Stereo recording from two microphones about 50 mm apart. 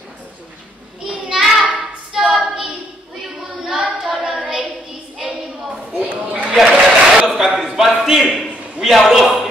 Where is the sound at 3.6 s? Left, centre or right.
Centre.